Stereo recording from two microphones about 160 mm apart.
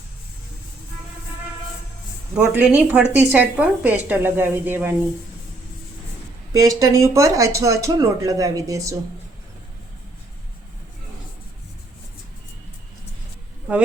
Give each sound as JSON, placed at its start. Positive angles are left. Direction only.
{"t": 2.3, "sound": "a woman's voice", "side_deg": -10}
{"t": 6.5, "sound": "speech", "side_deg": -20}